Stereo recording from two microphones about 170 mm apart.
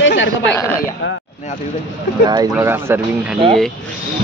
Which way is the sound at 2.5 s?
15° right (ahead or behind).